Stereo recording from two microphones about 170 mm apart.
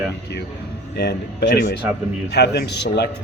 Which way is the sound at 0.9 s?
75° left (ahead or behind).